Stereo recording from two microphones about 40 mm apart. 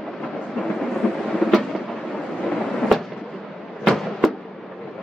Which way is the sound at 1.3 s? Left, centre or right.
Centre.